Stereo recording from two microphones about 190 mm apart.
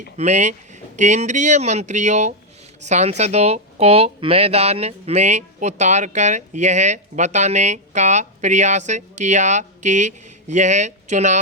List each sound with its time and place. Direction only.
0.2 s speech: 40° right (ahead or behind)